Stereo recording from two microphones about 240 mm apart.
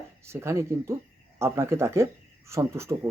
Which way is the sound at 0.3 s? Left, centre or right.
Centre.